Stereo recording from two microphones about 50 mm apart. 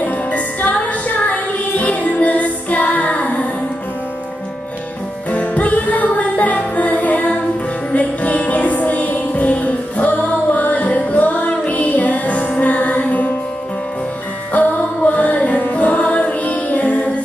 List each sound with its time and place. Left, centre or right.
0.0 s music: left
5.3 s music: left
14.5 s music: left